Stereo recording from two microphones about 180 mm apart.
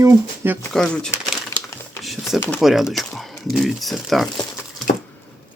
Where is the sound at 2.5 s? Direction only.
Centre (ahead or behind).